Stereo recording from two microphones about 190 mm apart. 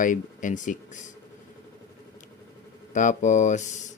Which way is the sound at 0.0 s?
45° left (ahead or behind).